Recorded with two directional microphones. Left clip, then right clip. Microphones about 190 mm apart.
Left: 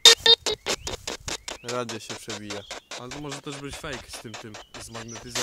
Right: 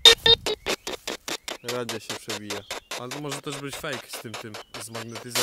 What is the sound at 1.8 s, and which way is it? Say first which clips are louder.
Speech: right 3 dB; 30° right (ahead or behind).